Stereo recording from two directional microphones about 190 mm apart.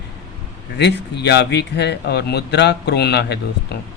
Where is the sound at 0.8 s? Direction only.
60° left (ahead or behind).